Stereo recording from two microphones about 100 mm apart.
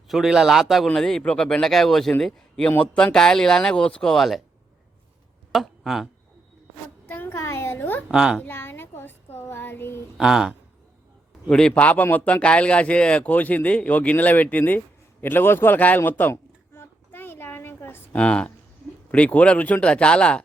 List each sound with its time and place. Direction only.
0.1 s speech: 5° right (ahead or behind)
5.5 s speech: centre (ahead or behind)
7.1 s a sound: 20° left (ahead or behind)
8.1 s speech: 5° right (ahead or behind)
8.4 s child singing: 20° left (ahead or behind)
10.2 s speech: 5° right (ahead or behind)
11.4 s speech: 10° left (ahead or behind)
15.2 s a sound: 20° left (ahead or behind)
18.2 s speech: 10° left (ahead or behind)